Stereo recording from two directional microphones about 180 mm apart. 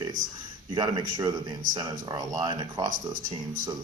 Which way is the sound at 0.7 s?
25° right (ahead or behind).